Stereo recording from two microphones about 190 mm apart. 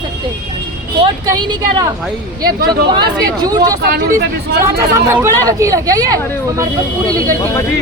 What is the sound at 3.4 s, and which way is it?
Speech, 20° right (ahead or behind).